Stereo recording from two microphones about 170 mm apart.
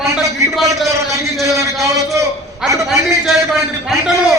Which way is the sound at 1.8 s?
20° right (ahead or behind).